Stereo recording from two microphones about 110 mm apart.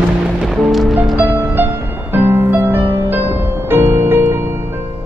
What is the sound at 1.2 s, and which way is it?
Music, 15° right (ahead or behind).